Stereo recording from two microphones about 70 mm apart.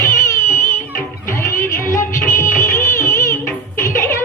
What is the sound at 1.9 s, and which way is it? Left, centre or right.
Music, left.